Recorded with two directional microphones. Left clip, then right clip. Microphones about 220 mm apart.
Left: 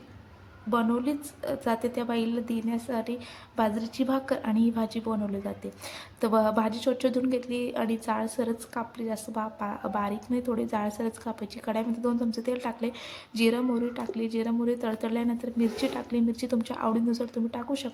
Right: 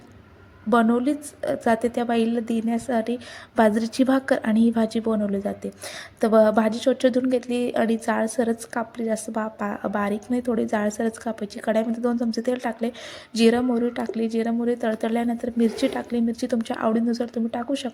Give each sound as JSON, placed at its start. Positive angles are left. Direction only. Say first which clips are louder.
{"t": 0.7, "sound": "a woman's voice", "louder": "right 7 dB", "side_deg": -20}